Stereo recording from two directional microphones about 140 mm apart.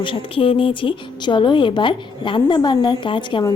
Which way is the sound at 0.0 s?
40° left (ahead or behind).